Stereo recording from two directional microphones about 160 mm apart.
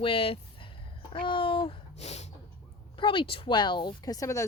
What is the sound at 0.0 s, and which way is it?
Speech, 35° left (ahead or behind).